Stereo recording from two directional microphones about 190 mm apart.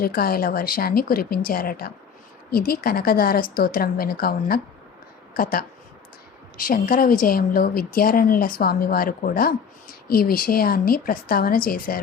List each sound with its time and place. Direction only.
0.0 s a woman's voice: 50° left (ahead or behind)